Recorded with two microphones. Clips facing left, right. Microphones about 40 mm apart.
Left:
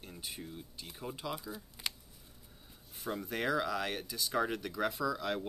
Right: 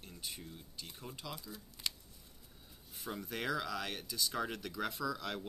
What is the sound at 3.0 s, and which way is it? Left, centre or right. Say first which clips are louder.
Speech: left 4 dB; centre.